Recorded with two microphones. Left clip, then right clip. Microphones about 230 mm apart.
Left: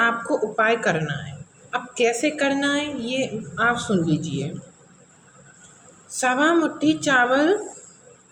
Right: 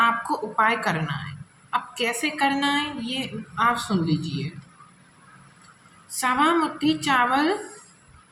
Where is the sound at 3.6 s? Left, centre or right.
Right.